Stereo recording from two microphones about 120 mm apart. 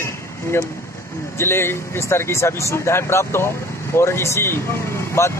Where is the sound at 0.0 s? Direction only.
20° left (ahead or behind).